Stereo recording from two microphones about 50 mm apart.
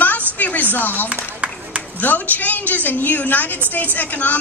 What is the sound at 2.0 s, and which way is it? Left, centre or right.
A woman's voice, left.